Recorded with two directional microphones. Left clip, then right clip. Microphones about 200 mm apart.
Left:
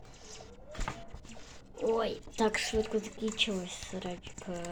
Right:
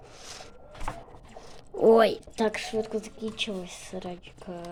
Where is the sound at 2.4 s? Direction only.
15° right (ahead or behind).